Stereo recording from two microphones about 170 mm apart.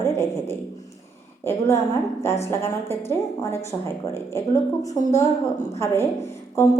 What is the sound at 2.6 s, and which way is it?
Speech, 15° left (ahead or behind).